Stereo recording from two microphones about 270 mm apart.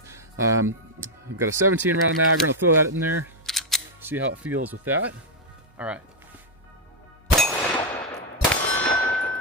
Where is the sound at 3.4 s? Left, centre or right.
Centre.